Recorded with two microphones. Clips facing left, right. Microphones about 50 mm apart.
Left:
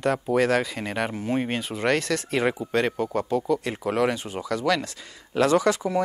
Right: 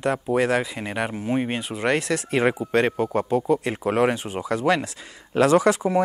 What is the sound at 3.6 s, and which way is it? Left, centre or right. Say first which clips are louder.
Speech: right 3 dB; right.